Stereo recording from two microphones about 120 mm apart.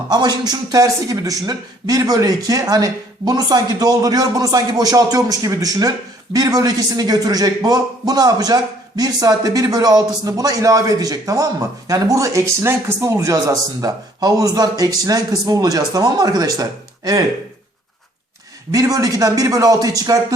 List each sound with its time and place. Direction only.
0.1 s a man's voice: 35° right (ahead or behind)
18.7 s speech: 30° right (ahead or behind)